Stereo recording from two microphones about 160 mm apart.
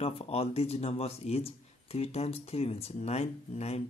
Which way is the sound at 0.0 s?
40° left (ahead or behind).